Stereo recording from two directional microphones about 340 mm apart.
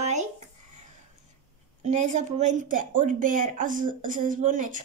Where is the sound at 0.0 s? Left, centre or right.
Right.